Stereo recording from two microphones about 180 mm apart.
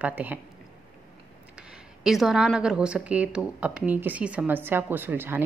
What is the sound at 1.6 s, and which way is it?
A woman's voice, centre (ahead or behind).